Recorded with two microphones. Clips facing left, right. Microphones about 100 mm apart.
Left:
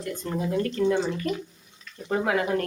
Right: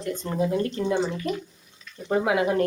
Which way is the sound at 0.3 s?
20° right (ahead or behind).